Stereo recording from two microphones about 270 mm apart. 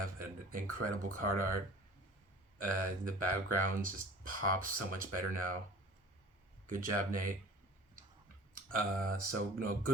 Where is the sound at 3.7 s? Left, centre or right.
Right.